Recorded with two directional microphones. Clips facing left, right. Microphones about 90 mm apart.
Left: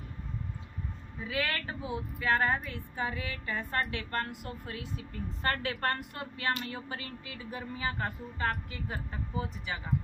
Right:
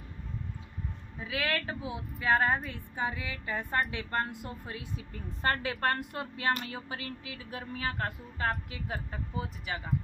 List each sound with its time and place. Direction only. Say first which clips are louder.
1.2 s a woman's voice: right 1 dB; 10° right (ahead or behind)
6.7 s a woman's voice: right 1 dB; 5° right (ahead or behind)